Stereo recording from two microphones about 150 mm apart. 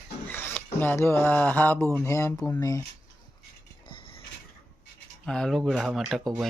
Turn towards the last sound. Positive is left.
turn(degrees=0)  # may be behind; listen again after turning